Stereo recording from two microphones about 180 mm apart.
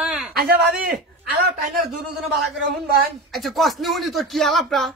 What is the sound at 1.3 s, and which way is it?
Speech, 55° right (ahead or behind).